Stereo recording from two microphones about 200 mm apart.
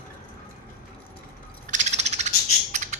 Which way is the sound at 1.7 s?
35° right (ahead or behind).